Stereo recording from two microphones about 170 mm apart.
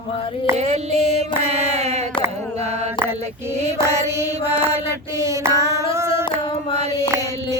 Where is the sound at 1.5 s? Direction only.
40° right (ahead or behind).